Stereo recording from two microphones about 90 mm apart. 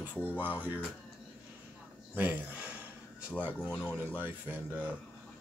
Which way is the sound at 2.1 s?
20° right (ahead or behind).